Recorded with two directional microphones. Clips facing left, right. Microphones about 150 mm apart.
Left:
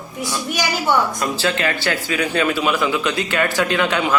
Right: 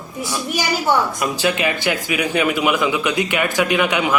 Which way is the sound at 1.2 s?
15° right (ahead or behind).